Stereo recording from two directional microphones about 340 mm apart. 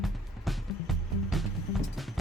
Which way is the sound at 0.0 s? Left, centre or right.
Centre.